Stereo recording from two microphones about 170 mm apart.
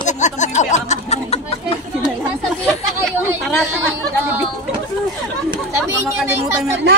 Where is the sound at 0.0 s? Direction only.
45° left (ahead or behind).